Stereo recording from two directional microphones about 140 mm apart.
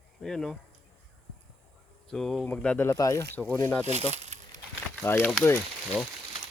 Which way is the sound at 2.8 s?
20° left (ahead or behind).